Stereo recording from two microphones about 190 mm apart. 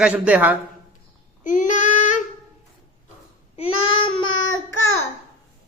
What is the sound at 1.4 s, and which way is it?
Child singing, 45° left (ahead or behind).